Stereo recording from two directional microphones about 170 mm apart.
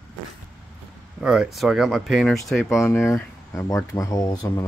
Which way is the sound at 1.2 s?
Centre (ahead or behind).